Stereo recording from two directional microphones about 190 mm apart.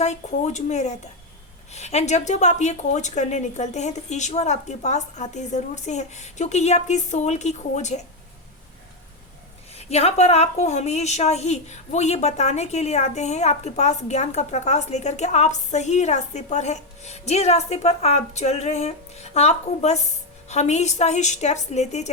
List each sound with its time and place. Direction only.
0.0 s a woman's voice: 35° left (ahead or behind)
9.7 s a woman's voice: 35° left (ahead or behind)